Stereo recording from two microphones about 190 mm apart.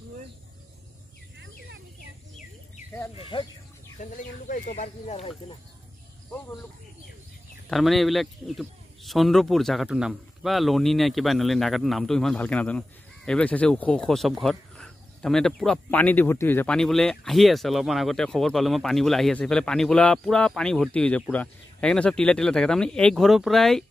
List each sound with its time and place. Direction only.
3.2 s speech: 25° left (ahead or behind)
4.0 s speech: 45° left (ahead or behind)
6.3 s speech: 10° left (ahead or behind)
7.7 s speech: centre (ahead or behind)